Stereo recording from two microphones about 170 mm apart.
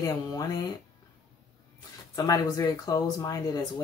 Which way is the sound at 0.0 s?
20° left (ahead or behind).